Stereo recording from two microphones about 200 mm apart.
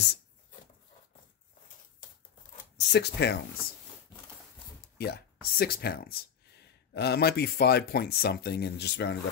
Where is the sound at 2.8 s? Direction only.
55° left (ahead or behind).